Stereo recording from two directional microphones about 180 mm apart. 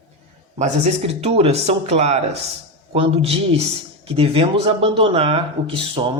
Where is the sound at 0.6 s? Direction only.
35° right (ahead or behind).